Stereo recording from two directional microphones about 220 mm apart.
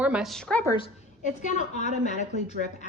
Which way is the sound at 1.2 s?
35° left (ahead or behind).